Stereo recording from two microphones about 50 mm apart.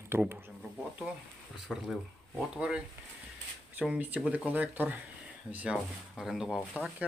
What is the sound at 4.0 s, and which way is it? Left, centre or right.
Speech, right.